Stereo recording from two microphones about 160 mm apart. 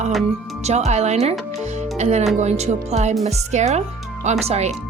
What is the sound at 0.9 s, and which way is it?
Speech, 45° right (ahead or behind).